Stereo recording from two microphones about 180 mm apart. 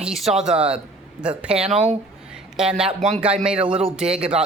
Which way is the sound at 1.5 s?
35° right (ahead or behind).